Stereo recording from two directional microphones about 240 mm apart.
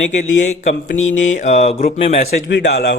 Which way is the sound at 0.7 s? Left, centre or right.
Left.